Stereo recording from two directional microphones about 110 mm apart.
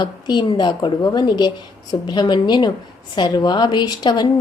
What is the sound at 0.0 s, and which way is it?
A woman's voice, 40° left (ahead or behind).